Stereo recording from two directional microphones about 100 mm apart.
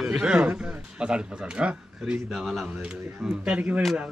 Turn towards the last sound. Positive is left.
turn(degrees=-15)  # may be behind; listen again after turning